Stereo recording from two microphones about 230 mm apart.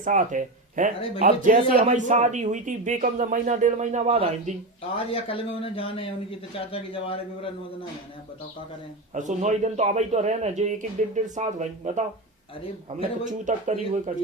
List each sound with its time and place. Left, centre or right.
0.0 s speech: right
4.9 s speech: left
9.1 s a man's voice: right
13.2 s speech: right